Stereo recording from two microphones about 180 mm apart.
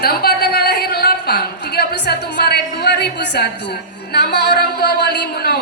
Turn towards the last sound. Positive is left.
turn(degrees=65)  # may be behind; listen again after turning